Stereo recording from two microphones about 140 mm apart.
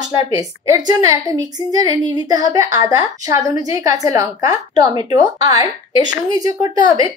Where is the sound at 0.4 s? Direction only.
25° right (ahead or behind).